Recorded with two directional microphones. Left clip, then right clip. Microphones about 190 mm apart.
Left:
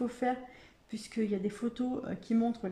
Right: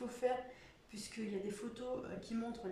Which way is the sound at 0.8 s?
45° left (ahead or behind).